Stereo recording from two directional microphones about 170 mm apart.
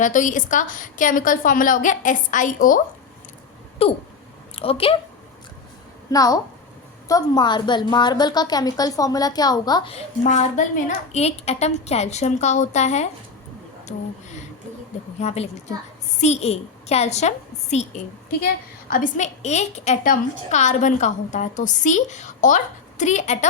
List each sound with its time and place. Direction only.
0.0 s a woman's voice: 50° left (ahead or behind)
3.8 s a sound: 35° left (ahead or behind)
4.5 s a woman's voice: 35° left (ahead or behind)
6.1 s a woman's voice: 20° left (ahead or behind)
9.9 s a woman's voice: 45° left (ahead or behind)
15.2 s a woman's voice: 40° left (ahead or behind)
18.9 s a woman's voice: 55° left (ahead or behind)